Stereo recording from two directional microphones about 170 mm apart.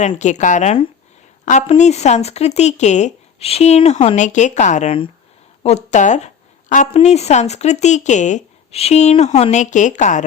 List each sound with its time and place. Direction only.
0.2 s speech: 45° left (ahead or behind)